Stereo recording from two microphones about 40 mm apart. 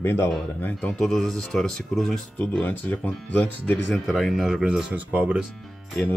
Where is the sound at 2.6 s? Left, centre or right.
Left.